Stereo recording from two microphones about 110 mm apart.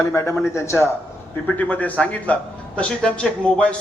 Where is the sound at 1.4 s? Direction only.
15° left (ahead or behind).